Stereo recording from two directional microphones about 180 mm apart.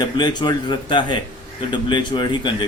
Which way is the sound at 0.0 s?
25° left (ahead or behind).